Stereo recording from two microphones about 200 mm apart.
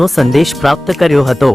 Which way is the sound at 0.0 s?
Centre (ahead or behind).